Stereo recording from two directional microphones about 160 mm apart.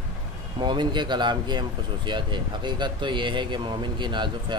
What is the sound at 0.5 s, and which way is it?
Speech, 30° right (ahead or behind).